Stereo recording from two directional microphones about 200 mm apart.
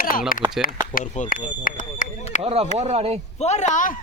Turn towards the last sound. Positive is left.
turn(degrees=40)  # may be behind; listen again after turning